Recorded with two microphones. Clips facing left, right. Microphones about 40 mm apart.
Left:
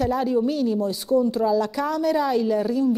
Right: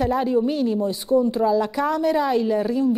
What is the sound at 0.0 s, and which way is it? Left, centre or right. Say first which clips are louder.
A woman's voice: right 1 dB; centre.